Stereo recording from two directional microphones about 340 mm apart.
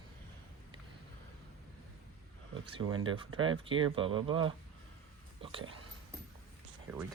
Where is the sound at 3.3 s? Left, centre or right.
Centre.